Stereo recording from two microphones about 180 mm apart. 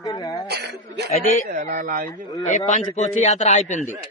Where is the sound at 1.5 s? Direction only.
45° right (ahead or behind).